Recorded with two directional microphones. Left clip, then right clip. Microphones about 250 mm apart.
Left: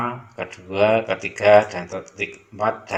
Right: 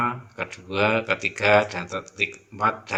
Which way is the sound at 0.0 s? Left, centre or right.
Centre.